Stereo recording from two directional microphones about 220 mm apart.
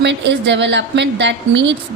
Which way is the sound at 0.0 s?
55° right (ahead or behind).